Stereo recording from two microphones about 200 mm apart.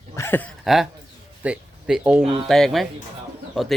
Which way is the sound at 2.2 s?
25° right (ahead or behind).